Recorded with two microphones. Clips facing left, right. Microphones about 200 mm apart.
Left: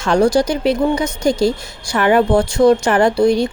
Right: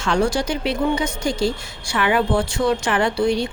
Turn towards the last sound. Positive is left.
turn(degrees=45)  # may be behind; listen again after turning